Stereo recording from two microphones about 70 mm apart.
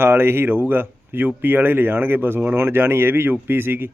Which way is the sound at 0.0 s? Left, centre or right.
Right.